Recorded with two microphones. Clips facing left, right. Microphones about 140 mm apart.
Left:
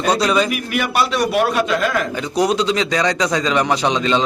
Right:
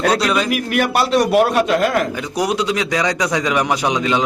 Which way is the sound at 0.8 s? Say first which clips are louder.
Right 3 dB; 50° right (ahead or behind).